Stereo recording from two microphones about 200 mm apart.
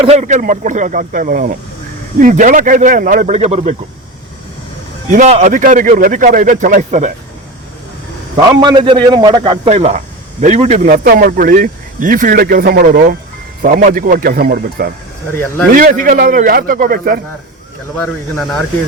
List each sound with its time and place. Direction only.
0.0 s a man's voice: 35° right (ahead or behind)
5.0 s a man's voice: 35° right (ahead or behind)
8.4 s a man's voice: 20° right (ahead or behind)
9.6 s a man's voice: 35° right (ahead or behind)
17.9 s speech: centre (ahead or behind)